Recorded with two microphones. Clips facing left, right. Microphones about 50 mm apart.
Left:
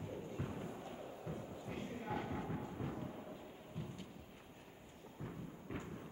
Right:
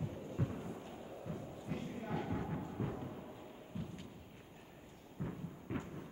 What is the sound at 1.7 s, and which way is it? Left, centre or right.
Clip-clop, centre.